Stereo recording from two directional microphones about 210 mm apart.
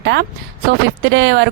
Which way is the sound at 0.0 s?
50° right (ahead or behind).